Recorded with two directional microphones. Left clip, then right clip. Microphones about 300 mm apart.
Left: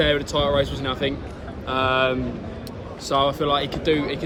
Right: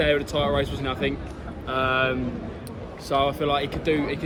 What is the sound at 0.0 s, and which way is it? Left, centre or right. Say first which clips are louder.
Speech: left 2 dB; centre.